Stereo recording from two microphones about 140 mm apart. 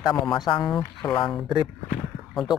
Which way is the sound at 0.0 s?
35° left (ahead or behind).